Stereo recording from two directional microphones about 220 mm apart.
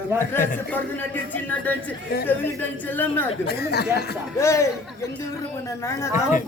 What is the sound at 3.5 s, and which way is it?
Speech, 45° left (ahead or behind).